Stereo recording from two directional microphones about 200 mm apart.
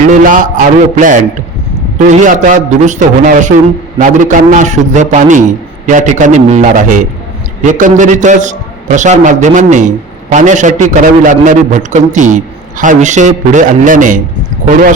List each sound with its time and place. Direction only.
0.0 s a man's voice: 40° right (ahead or behind)